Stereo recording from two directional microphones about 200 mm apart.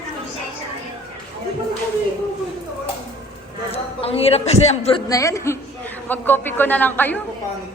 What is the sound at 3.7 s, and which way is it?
A man's voice, 30° left (ahead or behind).